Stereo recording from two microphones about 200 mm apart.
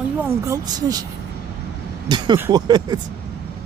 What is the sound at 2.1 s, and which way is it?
Speech, 20° right (ahead or behind).